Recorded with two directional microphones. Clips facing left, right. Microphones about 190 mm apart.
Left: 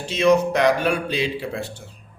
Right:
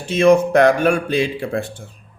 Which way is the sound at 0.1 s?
50° right (ahead or behind).